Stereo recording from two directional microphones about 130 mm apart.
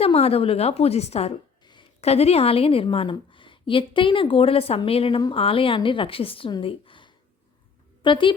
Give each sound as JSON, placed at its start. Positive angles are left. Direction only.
{"t": 0.0, "sound": "a woman's voice", "side_deg": 50}